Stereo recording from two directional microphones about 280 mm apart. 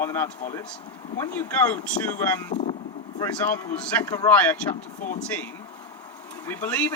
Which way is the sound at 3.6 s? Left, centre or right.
Centre.